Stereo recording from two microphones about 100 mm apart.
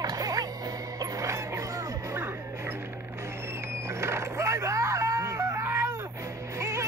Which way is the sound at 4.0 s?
30° right (ahead or behind).